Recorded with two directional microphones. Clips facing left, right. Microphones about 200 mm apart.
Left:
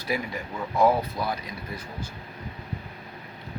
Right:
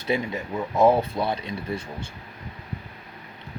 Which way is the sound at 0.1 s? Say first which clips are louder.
Right 4 dB; 25° right (ahead or behind).